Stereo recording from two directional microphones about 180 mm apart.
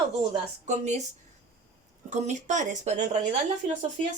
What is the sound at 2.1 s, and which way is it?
Speech, 40° right (ahead or behind).